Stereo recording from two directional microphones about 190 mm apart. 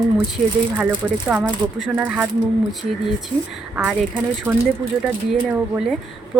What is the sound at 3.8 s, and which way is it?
Speech, centre (ahead or behind).